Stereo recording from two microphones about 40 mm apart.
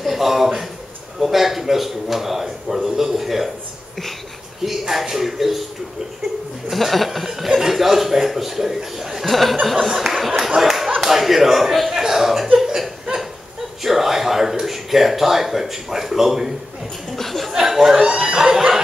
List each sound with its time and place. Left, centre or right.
0.0 s a man's voice: centre
4.6 s a man's voice: centre
6.7 s speech: centre
9.2 s a man's voice: centre
10.6 s clapping: centre
11.0 s a man's voice: centre
11.9 s chuckle: centre
12.5 s laughter: centre
13.8 s speech: centre
17.1 s a man's voice: centre
17.5 s a sound: centre
17.9 s speech: centre